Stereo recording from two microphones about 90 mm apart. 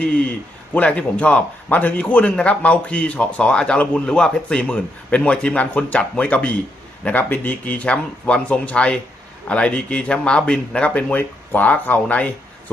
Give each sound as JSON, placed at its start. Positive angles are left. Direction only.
{"t": 0.7, "sound": "a man's voice", "side_deg": 15}